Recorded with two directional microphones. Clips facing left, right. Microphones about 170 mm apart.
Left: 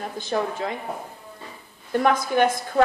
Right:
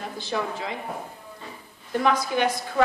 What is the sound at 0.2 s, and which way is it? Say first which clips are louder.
Speech: left 4 dB; 45° left (ahead or behind).